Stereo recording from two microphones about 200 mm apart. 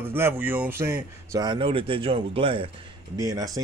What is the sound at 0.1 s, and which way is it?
Speech, 10° right (ahead or behind).